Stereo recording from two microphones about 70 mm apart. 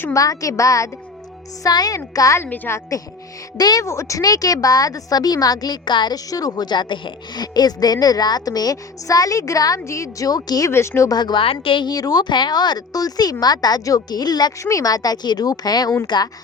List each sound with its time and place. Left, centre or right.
0.1 s speech: left
1.6 s a woman's voice: left
2.4 s speech: left
3.6 s a woman's voice: left
3.8 s speech: left
4.2 s a woman's voice: left
10.7 s speech: left
11.1 s a woman's voice: left
14.6 s a woman's voice: left
16.0 s a woman's voice: left